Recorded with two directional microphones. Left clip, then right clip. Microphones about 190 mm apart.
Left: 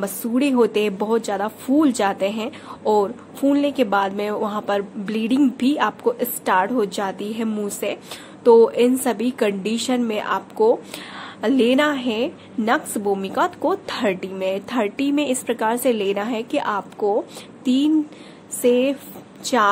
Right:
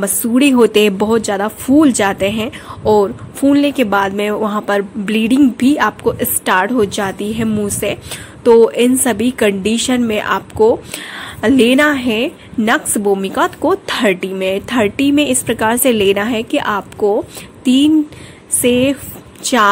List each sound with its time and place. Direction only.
0.0 s speech: 40° right (ahead or behind)